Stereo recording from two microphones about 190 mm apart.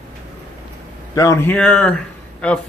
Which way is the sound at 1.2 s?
15° left (ahead or behind).